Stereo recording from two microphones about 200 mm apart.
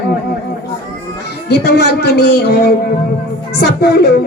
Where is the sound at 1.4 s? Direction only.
55° left (ahead or behind).